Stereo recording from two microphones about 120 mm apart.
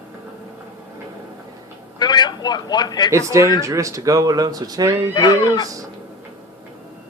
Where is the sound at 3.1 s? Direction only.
25° right (ahead or behind).